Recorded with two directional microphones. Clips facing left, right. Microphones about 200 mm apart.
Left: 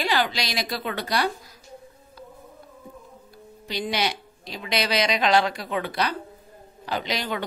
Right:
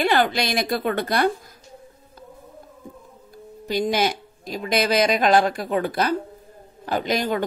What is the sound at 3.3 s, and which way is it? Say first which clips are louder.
A man's voice: right 7 dB; 45° right (ahead or behind).